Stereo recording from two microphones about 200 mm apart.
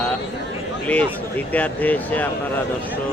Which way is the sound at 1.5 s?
10° left (ahead or behind).